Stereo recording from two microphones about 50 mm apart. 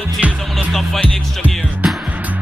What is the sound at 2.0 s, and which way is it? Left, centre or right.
Music, right.